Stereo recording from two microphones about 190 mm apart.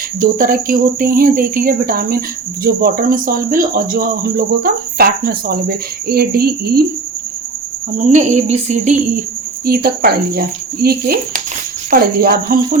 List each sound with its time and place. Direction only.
0.2 s speech: 50° right (ahead or behind)
7.9 s cricket: 40° right (ahead or behind)
9.6 s speech: 50° right (ahead or behind)